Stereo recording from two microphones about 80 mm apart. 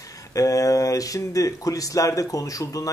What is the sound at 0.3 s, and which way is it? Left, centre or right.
Speech, left.